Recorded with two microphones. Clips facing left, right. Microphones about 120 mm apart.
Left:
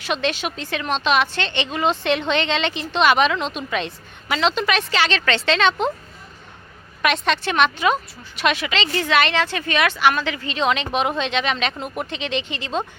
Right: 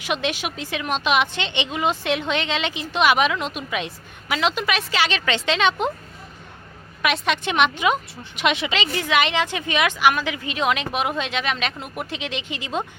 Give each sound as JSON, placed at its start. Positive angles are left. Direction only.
{"t": 0.0, "sound": "a woman's voice", "side_deg": -10}
{"t": 7.0, "sound": "a woman's voice", "side_deg": -5}
{"t": 7.4, "sound": "a woman's voice", "side_deg": -15}